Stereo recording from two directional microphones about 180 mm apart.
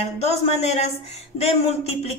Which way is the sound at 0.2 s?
35° left (ahead or behind).